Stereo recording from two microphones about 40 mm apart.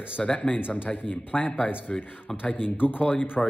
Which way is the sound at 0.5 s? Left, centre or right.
Left.